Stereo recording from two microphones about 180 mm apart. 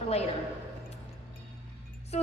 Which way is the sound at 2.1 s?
35° left (ahead or behind).